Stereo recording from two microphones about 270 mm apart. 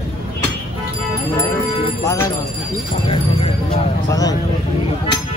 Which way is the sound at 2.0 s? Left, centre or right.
Centre.